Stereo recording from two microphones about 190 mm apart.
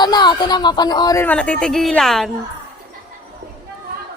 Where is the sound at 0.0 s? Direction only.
20° left (ahead or behind); by 2.3 s centre (ahead or behind).